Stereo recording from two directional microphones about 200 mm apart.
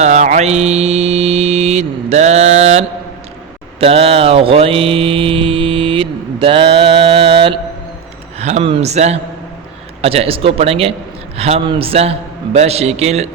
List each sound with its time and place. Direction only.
0.0 s mantra: 35° right (ahead or behind)
8.4 s speech: 35° right (ahead or behind)
10.0 s mantra: 30° right (ahead or behind)
11.3 s speech: 30° right (ahead or behind)